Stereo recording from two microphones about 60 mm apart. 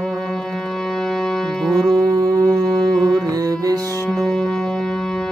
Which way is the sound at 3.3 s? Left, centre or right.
Right.